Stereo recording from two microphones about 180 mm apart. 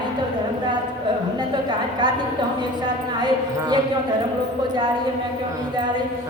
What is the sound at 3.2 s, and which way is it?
Speech, 25° right (ahead or behind).